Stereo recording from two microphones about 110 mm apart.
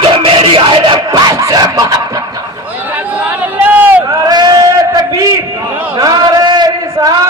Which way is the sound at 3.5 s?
15° right (ahead or behind).